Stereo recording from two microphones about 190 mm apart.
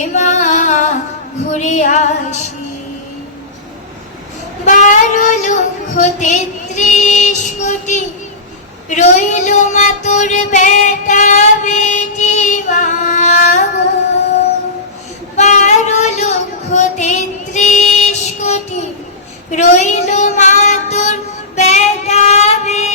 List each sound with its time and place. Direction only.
0.1 s music: 40° left (ahead or behind)
1.5 s child singing: 40° left (ahead or behind)
4.6 s child singing: 40° left (ahead or behind)
15.4 s child singing: 40° left (ahead or behind)